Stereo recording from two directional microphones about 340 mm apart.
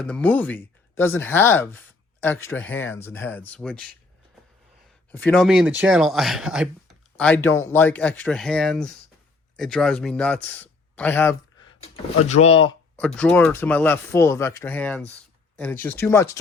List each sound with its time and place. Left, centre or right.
0.0 s speech: centre
5.1 s speech: centre
12.3 s speech: centre
13.0 s speech: centre